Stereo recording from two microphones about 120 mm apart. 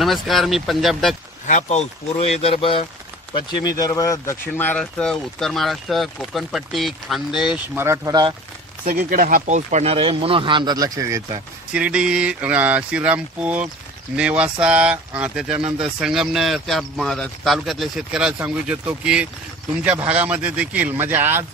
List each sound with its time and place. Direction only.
0.0 s speech: centre (ahead or behind)
1.5 s speech: 70° left (ahead or behind); by 2.8 s 50° left (ahead or behind)
3.6 s speech: 30° left (ahead or behind); by 7.6 s 5° right (ahead or behind)
7.7 s speech: 20° right (ahead or behind)
8.1 s speech: 35° right (ahead or behind)
9.3 s speech: 85° right
9.9 s speech: 50° right (ahead or behind); by 11.2 s 25° right (ahead or behind)
11.7 s speech: 10° right (ahead or behind)